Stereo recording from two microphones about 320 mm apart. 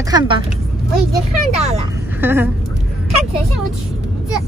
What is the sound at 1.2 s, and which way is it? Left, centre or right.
Speech, centre.